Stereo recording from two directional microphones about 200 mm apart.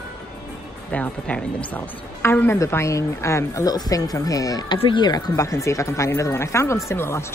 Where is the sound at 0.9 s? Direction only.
5° left (ahead or behind).